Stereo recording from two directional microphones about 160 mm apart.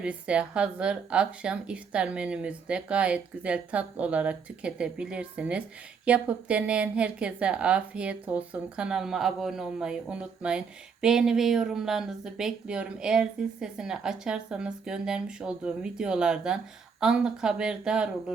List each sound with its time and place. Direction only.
0.0 s speech: 5° right (ahead or behind)